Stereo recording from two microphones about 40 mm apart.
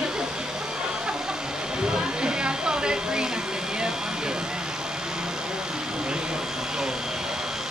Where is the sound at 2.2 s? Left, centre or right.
Right.